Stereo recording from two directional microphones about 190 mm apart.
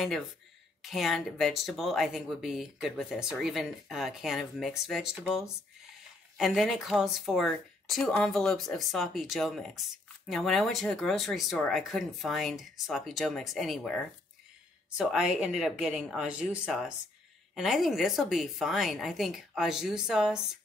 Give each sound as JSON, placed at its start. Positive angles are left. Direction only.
{"t": 0.8, "sound": "speech", "side_deg": 0}